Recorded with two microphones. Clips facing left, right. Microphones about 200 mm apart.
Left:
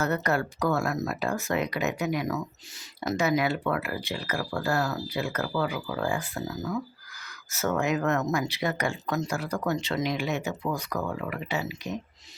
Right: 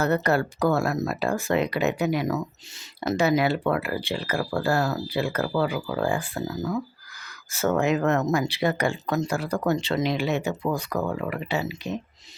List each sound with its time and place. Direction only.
0.0 s speech: 30° right (ahead or behind)